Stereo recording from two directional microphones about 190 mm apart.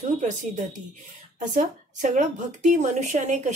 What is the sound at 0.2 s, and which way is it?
Speech, 40° right (ahead or behind).